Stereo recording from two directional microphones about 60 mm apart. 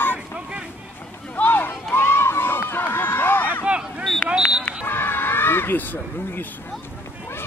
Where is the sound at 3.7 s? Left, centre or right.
Right.